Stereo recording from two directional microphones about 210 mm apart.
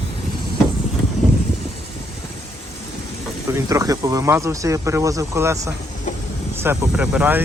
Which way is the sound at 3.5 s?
15° right (ahead or behind).